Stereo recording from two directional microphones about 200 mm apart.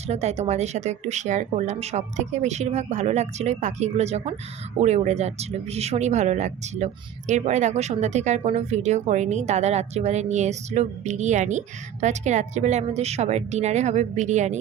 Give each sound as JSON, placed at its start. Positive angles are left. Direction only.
{"t": 0.1, "sound": "speech", "side_deg": -35}